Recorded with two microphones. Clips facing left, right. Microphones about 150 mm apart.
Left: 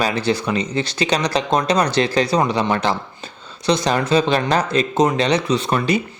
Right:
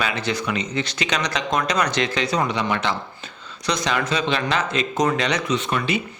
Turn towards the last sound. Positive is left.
turn(degrees=35)  # may be behind; listen again after turning